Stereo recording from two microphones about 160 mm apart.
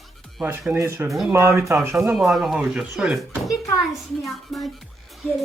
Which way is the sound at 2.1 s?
Centre (ahead or behind).